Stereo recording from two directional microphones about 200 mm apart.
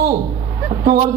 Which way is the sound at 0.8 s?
45° right (ahead or behind).